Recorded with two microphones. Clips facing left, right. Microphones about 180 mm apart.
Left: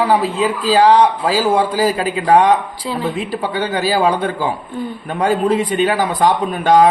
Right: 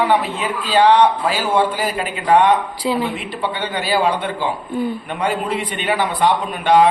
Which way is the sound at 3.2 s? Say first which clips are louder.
Left 4 dB; 40° left (ahead or behind).